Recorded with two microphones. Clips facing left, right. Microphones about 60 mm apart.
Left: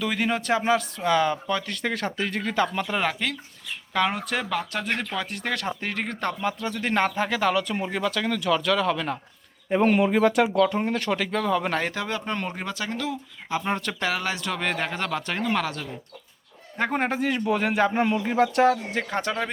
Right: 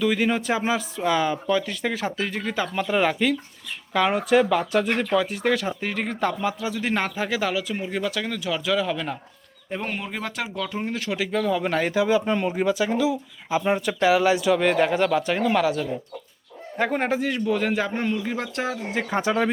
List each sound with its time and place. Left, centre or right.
0.0 s speech: centre
9.9 s a man's voice: centre
18.1 s a man's voice: centre
18.3 s speech: centre